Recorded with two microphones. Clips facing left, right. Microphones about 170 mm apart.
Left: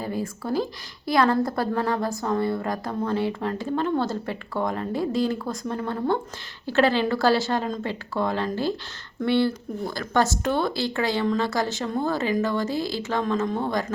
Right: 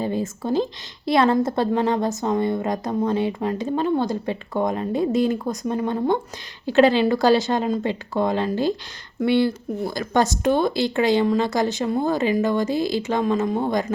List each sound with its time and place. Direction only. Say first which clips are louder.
0.0 s a woman's voice: right 4 dB; 25° right (ahead or behind)